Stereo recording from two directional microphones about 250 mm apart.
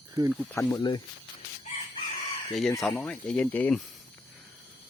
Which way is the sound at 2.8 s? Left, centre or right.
Centre.